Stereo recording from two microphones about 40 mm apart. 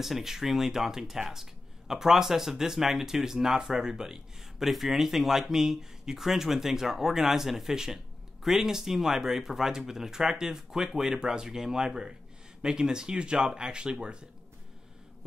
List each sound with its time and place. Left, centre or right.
0.0 s speech: centre